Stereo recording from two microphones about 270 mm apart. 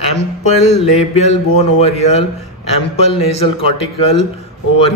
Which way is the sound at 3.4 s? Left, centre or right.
Left.